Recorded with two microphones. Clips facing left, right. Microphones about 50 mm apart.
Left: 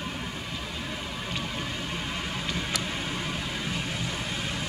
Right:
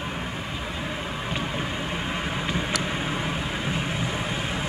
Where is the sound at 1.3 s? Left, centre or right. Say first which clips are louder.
Right 4 dB; right.